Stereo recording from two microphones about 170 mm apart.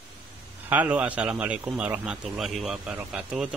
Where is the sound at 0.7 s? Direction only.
10° right (ahead or behind).